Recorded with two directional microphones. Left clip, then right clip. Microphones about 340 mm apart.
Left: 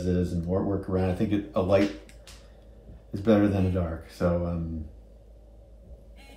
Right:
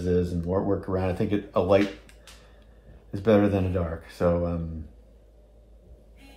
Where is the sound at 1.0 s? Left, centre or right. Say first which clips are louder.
Right 1 dB; centre.